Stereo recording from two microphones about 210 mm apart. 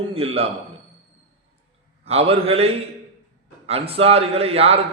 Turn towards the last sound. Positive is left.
turn(degrees=-30)  # may be behind; listen again after turning